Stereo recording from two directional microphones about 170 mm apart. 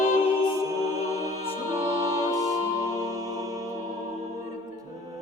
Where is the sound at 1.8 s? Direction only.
20° right (ahead or behind).